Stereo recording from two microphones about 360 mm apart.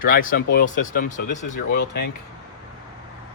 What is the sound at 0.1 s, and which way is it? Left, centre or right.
Speech, left.